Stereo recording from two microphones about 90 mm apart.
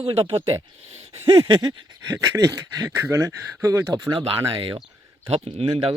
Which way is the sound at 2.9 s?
30° right (ahead or behind).